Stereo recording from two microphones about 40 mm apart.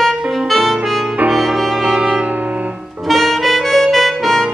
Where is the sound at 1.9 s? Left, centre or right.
Right.